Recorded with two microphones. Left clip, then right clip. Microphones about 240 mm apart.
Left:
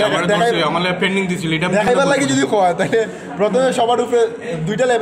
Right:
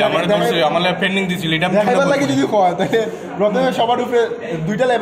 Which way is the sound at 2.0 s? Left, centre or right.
Left.